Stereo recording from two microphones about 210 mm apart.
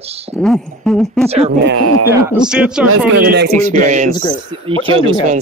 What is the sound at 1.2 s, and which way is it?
Speech, 30° right (ahead or behind).